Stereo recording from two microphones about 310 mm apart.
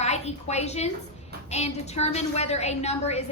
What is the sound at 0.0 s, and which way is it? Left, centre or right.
A woman's voice, left.